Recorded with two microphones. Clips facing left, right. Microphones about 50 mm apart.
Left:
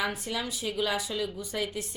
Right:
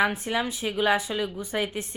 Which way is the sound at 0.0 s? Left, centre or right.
Right.